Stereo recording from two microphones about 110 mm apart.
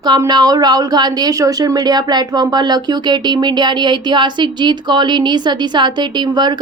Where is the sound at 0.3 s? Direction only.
40° right (ahead or behind).